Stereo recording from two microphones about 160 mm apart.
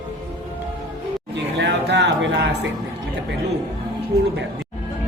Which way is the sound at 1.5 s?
90° right.